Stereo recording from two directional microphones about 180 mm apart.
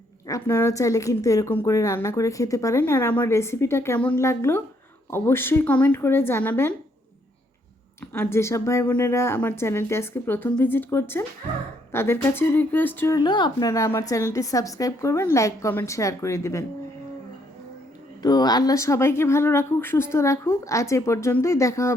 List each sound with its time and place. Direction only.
0.3 s speech: 15° left (ahead or behind)
8.1 s speech: 10° left (ahead or behind)
18.2 s speech: 20° left (ahead or behind)